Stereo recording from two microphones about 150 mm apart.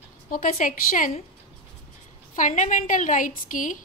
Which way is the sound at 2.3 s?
60° left (ahead or behind).